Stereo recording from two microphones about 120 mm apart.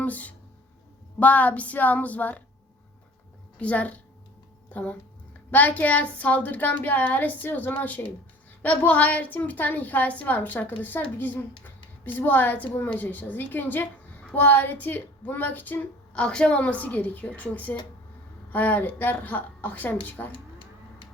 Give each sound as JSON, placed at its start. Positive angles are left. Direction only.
{"t": 0.0, "sound": "a woman's voice", "side_deg": 15}
{"t": 3.6, "sound": "a woman's voice", "side_deg": 10}